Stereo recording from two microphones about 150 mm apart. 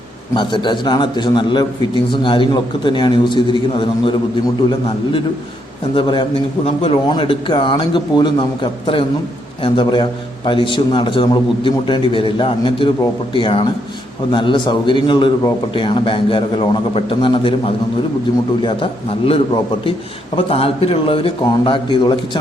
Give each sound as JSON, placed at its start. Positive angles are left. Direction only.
{"t": 0.3, "sound": "a man's voice", "side_deg": 30}
{"t": 5.9, "sound": "a man's voice", "side_deg": 30}
{"t": 18.6, "sound": "a man's voice", "side_deg": 35}